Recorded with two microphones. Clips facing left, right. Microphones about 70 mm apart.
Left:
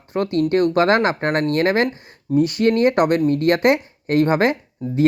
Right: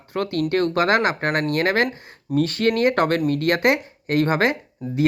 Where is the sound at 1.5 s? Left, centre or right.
Right.